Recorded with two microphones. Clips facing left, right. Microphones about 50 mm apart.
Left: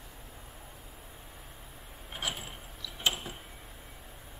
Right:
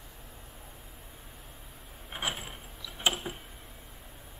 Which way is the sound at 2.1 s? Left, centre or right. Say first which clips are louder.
Right 2 dB; centre.